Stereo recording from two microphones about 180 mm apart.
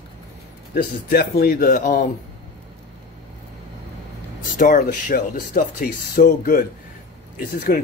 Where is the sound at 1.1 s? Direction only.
60° left (ahead or behind).